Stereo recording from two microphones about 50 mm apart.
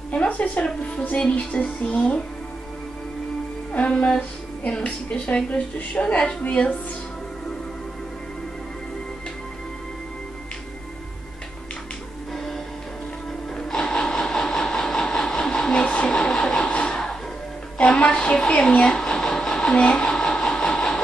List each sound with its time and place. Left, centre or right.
0.1 s music: left
3.7 s music: left
13.6 s a sound: centre
16.1 s vehicle: centre
16.9 s music: centre
17.7 s a sound: left